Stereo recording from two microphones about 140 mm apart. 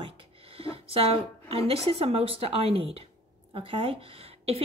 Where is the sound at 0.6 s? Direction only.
40° right (ahead or behind).